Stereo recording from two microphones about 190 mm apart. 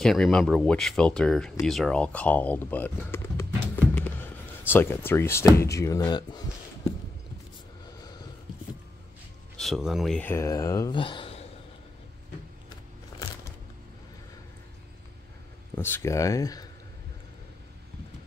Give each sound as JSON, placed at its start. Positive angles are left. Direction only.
{"t": 0.0, "sound": "speech", "side_deg": 0}
{"t": 9.6, "sound": "speech", "side_deg": 0}
{"t": 15.7, "sound": "speech", "side_deg": 10}